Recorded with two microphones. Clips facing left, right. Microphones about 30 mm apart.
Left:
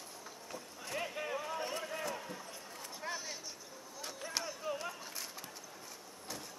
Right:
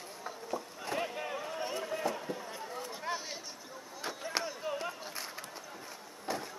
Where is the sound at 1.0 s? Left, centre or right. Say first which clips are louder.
Right 1 dB; centre.